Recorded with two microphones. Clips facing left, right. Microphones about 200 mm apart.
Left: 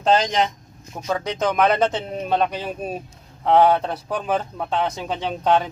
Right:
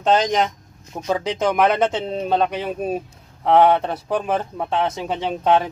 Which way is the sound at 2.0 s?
25° right (ahead or behind).